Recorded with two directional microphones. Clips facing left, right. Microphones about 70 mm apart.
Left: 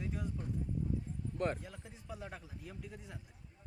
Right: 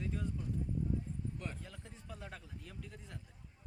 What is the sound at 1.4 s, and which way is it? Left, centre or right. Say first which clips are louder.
Speech: left 10 dB; left.